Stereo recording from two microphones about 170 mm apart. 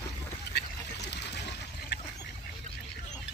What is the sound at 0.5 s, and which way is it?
Duck, 80° left.